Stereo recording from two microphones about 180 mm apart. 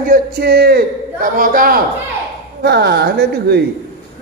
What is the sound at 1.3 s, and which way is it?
Speech, 50° right (ahead or behind).